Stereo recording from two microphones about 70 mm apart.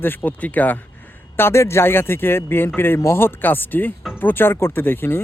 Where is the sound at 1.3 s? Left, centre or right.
Left.